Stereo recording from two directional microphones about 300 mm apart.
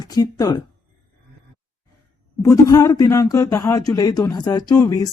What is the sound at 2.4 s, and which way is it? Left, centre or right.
Speech, centre.